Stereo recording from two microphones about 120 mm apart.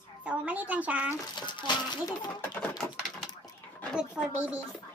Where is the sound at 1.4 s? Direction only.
40° left (ahead or behind).